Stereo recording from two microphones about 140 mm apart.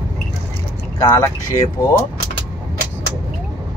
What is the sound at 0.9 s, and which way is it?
Speech, 20° left (ahead or behind).